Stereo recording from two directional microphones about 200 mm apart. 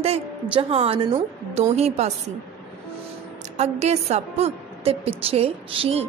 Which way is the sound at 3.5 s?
35° right (ahead or behind).